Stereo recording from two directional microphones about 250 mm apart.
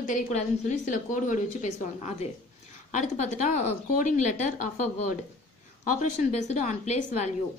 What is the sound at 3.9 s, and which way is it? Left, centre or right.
Speech, left.